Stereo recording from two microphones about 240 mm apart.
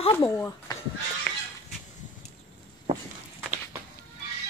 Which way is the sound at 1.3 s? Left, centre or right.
Centre.